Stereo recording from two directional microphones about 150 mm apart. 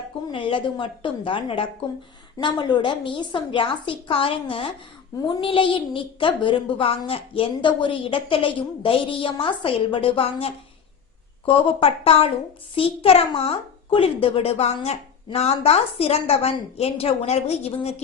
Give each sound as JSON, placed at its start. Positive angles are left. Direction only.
{"t": 0.3, "sound": "a child's voice", "side_deg": 35}